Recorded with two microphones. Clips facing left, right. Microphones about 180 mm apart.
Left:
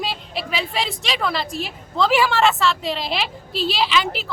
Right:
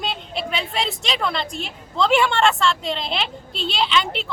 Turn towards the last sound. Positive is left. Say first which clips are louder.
# left 1 dB
turn(degrees=5)  # may be behind; listen again after turning